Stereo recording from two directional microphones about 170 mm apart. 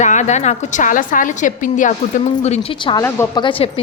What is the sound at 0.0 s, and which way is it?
A woman's voice, 45° left (ahead or behind).